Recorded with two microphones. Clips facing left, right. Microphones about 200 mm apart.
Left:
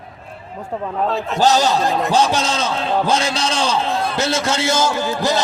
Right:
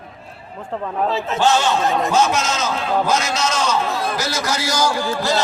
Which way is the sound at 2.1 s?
35° left (ahead or behind).